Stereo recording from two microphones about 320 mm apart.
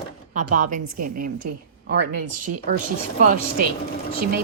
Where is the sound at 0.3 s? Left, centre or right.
Right.